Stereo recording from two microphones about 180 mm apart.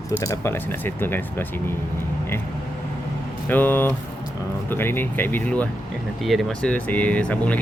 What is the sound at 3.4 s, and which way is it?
Speech, 10° left (ahead or behind).